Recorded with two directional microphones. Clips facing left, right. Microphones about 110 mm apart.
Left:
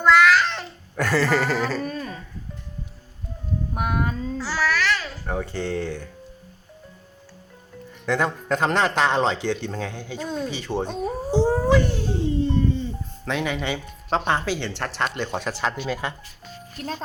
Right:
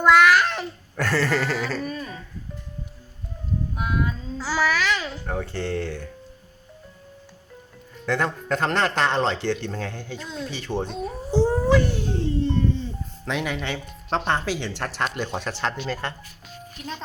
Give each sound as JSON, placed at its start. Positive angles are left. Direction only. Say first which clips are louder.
{"t": 0.0, "sound": "babbling", "louder": "even", "side_deg": -10}
{"t": 0.9, "sound": "speech", "louder": "left 2 dB", "side_deg": 5}
{"t": 1.8, "sound": "a sound", "louder": "left 1 dB", "side_deg": 40}
{"t": 3.8, "sound": "music", "louder": "left 3 dB", "side_deg": 55}
{"t": 4.4, "sound": "a sound", "louder": "right 2 dB", "side_deg": -15}
{"t": 5.1, "sound": "speech", "louder": "left 1 dB", "side_deg": 5}
{"t": 8.0, "sound": "speech", "louder": "left 1 dB", "side_deg": 5}
{"t": 16.7, "sound": "speech", "louder": "left 4 dB", "side_deg": 40}